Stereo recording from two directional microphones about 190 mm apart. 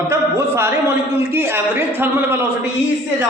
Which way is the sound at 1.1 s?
15° right (ahead or behind).